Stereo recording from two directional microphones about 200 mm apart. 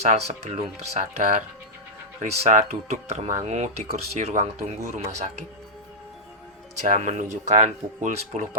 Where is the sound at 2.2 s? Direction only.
35° right (ahead or behind).